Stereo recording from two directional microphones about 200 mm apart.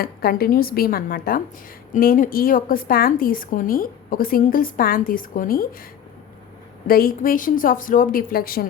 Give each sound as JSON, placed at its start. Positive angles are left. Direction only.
{"t": 0.0, "sound": "a woman's voice", "side_deg": 50}
{"t": 6.8, "sound": "a woman's voice", "side_deg": 45}